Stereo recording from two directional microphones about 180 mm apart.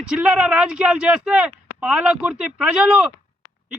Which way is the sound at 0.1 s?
5° right (ahead or behind).